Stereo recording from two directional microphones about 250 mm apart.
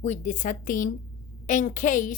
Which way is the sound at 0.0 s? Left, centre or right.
Left.